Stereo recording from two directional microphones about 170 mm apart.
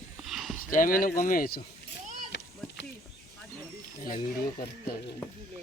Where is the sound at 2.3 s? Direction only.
90° left.